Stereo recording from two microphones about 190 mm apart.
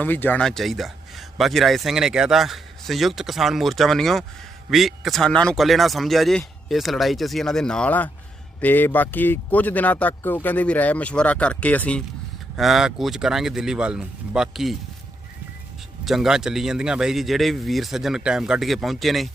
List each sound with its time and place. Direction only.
0.0 s speech: 10° left (ahead or behind)
16.0 s speech: centre (ahead or behind)